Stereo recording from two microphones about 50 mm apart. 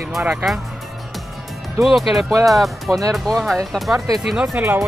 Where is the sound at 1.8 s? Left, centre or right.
Centre.